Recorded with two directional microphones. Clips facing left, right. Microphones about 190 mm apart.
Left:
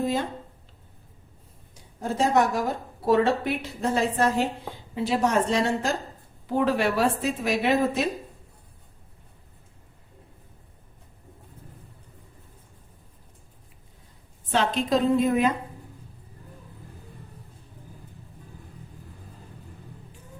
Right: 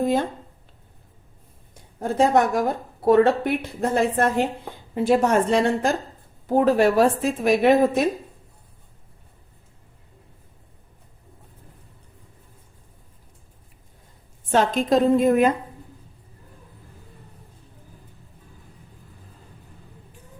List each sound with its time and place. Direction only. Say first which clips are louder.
2.0 s a woman's voice: right 4 dB; 55° right (ahead or behind)
6.5 s a woman's voice: right 6 dB; 45° right (ahead or behind)
14.5 s a woman's voice: right 4 dB; 45° right (ahead or behind)